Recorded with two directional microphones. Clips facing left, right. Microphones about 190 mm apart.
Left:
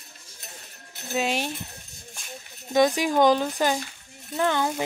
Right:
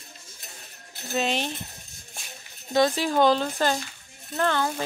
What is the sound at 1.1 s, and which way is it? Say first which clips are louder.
Speech: even; 10° left (ahead or behind).